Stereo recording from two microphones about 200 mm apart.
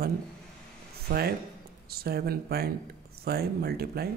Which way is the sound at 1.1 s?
50° right (ahead or behind).